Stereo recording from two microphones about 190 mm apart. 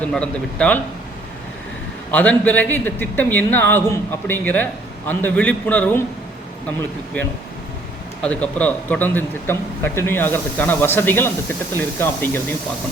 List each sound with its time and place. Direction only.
0.0 s a man's voice: 5° left (ahead or behind)
2.0 s a man's voice: 10° left (ahead or behind)
8.2 s a man's voice: 5° left (ahead or behind)